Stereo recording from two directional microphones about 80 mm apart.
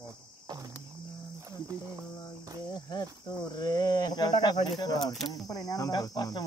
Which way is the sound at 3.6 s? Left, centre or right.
Left.